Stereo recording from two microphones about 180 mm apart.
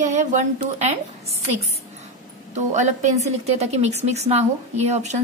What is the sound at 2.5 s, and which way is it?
A woman's voice, 40° right (ahead or behind).